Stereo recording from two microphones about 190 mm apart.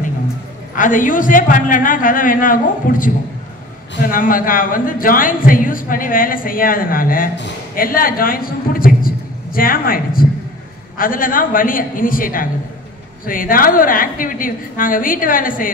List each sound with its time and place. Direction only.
0.7 s a man's voice: 45° left (ahead or behind)
4.1 s a man's voice: 45° left (ahead or behind)